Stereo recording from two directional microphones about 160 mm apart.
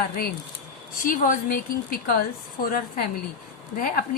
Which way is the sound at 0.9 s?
60° left (ahead or behind).